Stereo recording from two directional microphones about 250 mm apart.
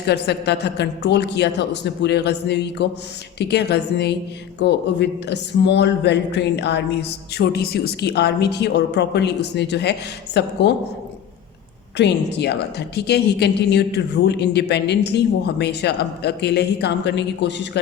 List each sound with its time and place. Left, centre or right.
0.0 s a woman's voice: left
11.9 s a woman's voice: left